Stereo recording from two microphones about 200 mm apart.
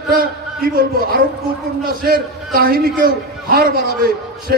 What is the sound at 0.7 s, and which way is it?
A man's voice, 50° right (ahead or behind).